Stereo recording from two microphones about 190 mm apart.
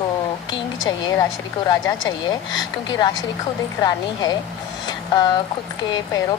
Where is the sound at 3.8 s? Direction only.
20° left (ahead or behind).